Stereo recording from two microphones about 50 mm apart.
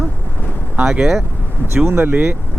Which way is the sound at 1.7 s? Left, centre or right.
Right.